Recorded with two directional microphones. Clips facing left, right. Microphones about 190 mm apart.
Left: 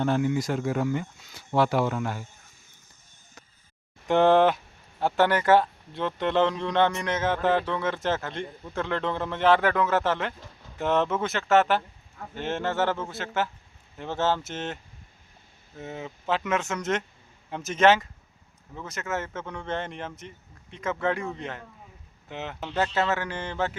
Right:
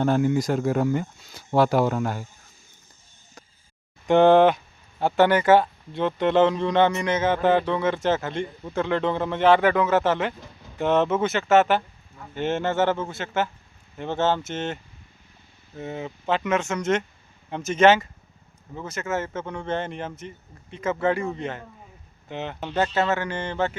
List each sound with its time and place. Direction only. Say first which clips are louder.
0.0 s speech: right 4 dB; 40° right (ahead or behind)
4.0 s speech: right 4 dB; centre (ahead or behind)
15.8 s speech: right 4 dB; centre (ahead or behind)